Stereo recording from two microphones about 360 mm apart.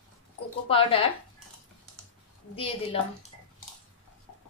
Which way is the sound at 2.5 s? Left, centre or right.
Centre.